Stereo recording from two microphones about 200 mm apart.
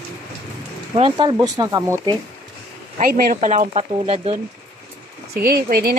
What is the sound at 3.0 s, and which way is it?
Speech, 45° right (ahead or behind).